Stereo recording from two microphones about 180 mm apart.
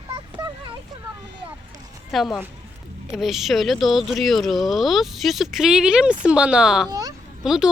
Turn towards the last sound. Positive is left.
turn(degrees=0)  # may be behind; listen again after turning